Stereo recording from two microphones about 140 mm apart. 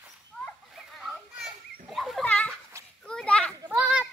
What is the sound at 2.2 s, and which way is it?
Children playing, 10° left (ahead or behind).